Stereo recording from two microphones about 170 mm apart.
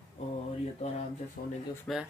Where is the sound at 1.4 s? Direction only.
55° left (ahead or behind).